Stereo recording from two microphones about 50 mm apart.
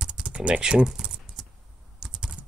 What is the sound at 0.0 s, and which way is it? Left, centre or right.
Speech, right.